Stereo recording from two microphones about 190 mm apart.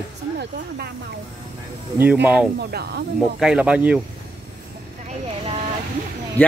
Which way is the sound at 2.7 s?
55° right (ahead or behind).